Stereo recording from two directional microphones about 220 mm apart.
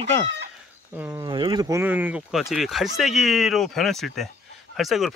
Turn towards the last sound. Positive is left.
turn(degrees=0)  # may be behind; listen again after turning